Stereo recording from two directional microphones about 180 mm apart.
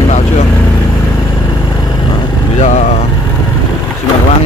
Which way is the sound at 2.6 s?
40° left (ahead or behind).